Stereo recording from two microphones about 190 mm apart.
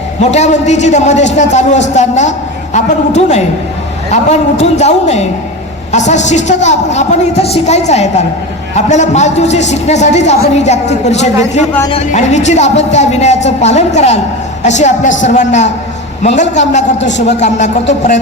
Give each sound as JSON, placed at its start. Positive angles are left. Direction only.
{"t": 0.2, "sound": "a man's voice", "side_deg": 35}
{"t": 17.0, "sound": "a man's voice", "side_deg": 70}
{"t": 17.2, "sound": "a man's voice", "side_deg": 40}